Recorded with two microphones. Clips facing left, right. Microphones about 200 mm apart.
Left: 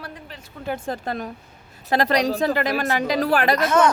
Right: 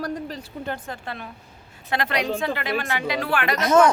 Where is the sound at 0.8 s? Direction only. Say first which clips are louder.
Left 7 dB; 40° left (ahead or behind).